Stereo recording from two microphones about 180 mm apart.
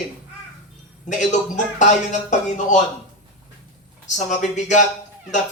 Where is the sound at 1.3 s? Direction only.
45° left (ahead or behind).